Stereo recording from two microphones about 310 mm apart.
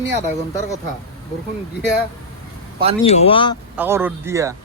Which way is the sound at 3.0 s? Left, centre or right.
Centre.